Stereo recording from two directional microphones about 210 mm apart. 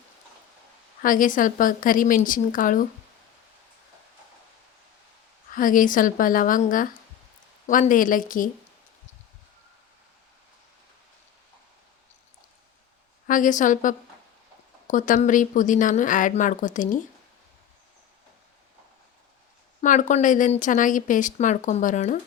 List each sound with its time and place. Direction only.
1.0 s a woman's voice: 40° left (ahead or behind)
5.5 s a woman's voice: 40° left (ahead or behind)
13.2 s a woman's voice: 40° left (ahead or behind)
19.8 s a woman's voice: 35° left (ahead or behind)